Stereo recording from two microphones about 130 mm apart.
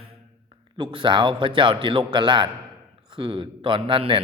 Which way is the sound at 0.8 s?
40° right (ahead or behind).